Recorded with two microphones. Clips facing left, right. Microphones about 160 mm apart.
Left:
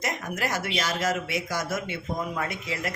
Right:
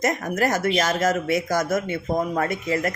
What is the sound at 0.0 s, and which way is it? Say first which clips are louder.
Speech: right 8 dB; 45° right (ahead or behind).